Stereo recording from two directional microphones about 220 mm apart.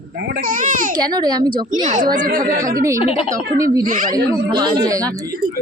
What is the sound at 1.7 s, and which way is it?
Speech, 35° right (ahead or behind).